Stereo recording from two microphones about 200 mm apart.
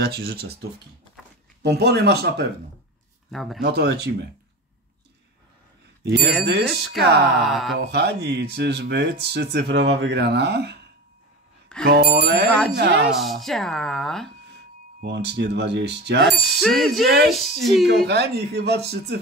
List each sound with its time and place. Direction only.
0.0 s bicycle bell: 50° right (ahead or behind)
1.6 s speech: 55° right (ahead or behind)
3.3 s speech: centre (ahead or behind)
3.6 s bicycle bell: 55° right (ahead or behind)
6.0 s bicycle bell: 55° right (ahead or behind)
6.4 s speech: 55° right (ahead or behind)
6.7 s speech: centre (ahead or behind)
7.7 s speech: 55° right (ahead or behind)
11.8 s bicycle bell: 55° right (ahead or behind)
12.7 s speech: 55° right (ahead or behind)
13.2 s speech: centre (ahead or behind)
15.0 s speech: 55° right (ahead or behind)
16.3 s speech: centre (ahead or behind)
17.8 s speech: 55° right (ahead or behind)